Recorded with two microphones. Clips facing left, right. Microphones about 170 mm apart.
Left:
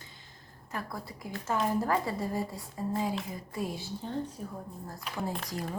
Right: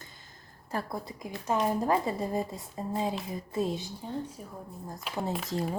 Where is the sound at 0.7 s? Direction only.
30° right (ahead or behind); by 4.5 s 10° right (ahead or behind).